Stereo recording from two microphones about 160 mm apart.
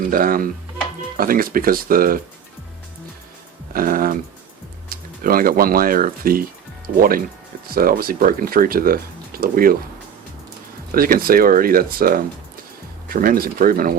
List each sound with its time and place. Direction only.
0.1 s speech: 65° right (ahead or behind)
3.7 s speech: 60° right (ahead or behind)
10.9 s speech: 65° right (ahead or behind)
13.2 s speech: 65° right (ahead or behind)